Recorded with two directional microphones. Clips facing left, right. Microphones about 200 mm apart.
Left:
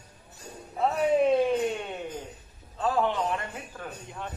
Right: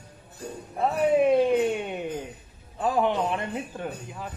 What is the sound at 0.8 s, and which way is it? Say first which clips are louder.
Speech: right 2 dB; 5° right (ahead or behind).